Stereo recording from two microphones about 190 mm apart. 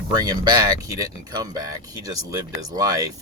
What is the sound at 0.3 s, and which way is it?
Speech, 25° right (ahead or behind).